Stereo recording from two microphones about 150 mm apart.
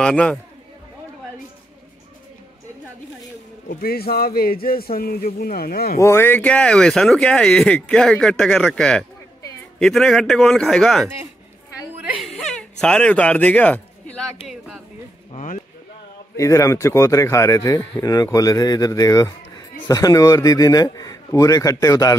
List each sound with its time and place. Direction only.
0.0 s a man's voice: 5° left (ahead or behind)
3.6 s a man's voice: 90° left
5.9 s speech: 15° left (ahead or behind); by 14.8 s centre (ahead or behind)
15.3 s speech: 60° left (ahead or behind)
16.3 s speech: 20° left (ahead or behind)